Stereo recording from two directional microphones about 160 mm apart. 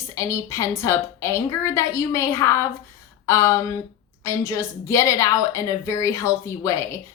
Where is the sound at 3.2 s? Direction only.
20° left (ahead or behind).